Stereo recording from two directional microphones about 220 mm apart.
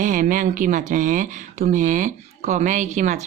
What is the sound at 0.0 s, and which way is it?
Speech, 35° right (ahead or behind).